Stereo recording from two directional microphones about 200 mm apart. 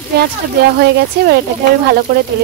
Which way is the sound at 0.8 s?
55° right (ahead or behind).